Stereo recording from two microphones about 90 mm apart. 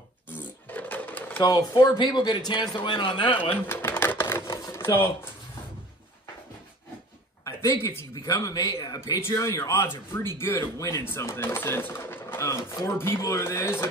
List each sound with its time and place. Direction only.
0.4 s sewing machine: 20° left (ahead or behind)
1.4 s a man's voice: 45° left (ahead or behind); by 3.3 s 65° left (ahead or behind)
3.6 s typewriter: 25° left (ahead or behind)
4.5 s sewing machine: 30° left (ahead or behind)
7.4 s a man's voice: 35° left (ahead or behind)